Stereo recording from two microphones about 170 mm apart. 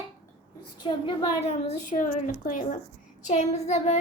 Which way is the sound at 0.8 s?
30° left (ahead or behind).